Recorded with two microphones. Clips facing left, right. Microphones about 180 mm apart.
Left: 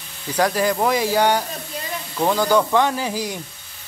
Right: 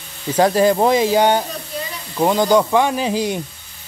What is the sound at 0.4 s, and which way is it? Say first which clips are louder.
Speech: right 5 dB; 25° right (ahead or behind).